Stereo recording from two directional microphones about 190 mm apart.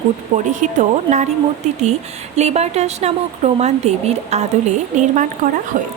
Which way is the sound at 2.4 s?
35° right (ahead or behind).